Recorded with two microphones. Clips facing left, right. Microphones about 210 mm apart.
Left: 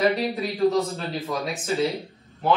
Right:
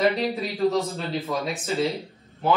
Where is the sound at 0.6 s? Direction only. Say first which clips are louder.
Left 2 dB; centre (ahead or behind).